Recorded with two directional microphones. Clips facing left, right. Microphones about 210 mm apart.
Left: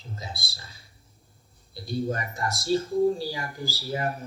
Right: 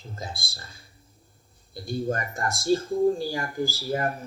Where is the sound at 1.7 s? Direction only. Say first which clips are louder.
Right 1 dB; 50° right (ahead or behind).